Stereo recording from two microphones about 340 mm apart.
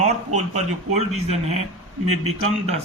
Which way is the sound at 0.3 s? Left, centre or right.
Centre.